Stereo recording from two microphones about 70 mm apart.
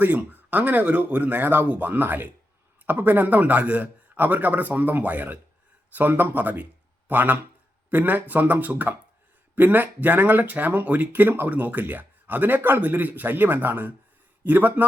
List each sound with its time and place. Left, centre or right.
0.0 s speech: right